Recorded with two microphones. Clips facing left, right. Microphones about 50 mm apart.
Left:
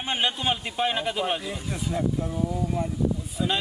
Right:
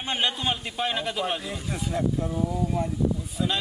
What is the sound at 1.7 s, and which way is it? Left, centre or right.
Speech, centre.